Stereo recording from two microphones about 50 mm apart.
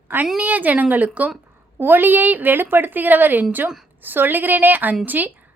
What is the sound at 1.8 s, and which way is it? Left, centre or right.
A woman's voice, right.